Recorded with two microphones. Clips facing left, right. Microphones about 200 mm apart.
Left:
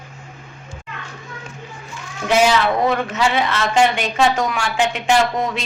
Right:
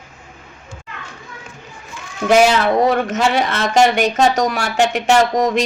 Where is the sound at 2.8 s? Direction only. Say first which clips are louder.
Right 3 dB; 45° right (ahead or behind).